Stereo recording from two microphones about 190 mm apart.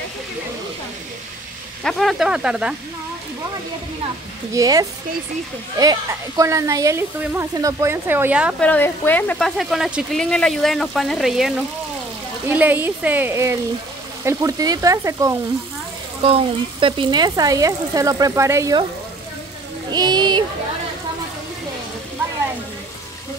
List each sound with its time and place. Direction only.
1.8 s speech: centre (ahead or behind)
4.6 s speech: 20° right (ahead or behind)
8.5 s speech: 10° left (ahead or behind); by 15.3 s 15° right (ahead or behind)
16.2 s speech: 30° right (ahead or behind)
19.9 s speech: 20° right (ahead or behind)